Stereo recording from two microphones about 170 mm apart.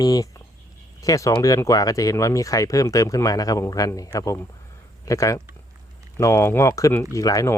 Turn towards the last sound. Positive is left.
turn(degrees=20)  # may be behind; listen again after turning